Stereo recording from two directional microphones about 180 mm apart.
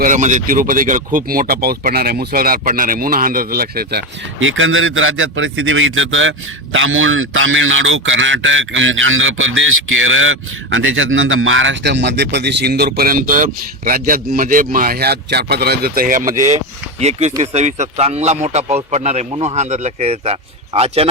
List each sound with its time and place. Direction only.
0.0 s a man's voice: 45° right (ahead or behind)
17.0 s speech: 40° right (ahead or behind)